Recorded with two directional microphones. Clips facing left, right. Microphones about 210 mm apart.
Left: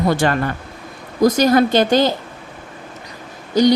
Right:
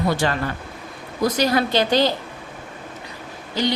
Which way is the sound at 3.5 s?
40° left (ahead or behind).